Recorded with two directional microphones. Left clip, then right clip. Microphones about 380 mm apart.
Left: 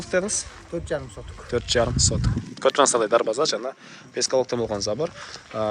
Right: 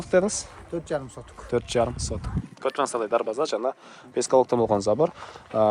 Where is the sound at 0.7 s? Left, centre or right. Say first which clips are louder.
Left 1 dB; right.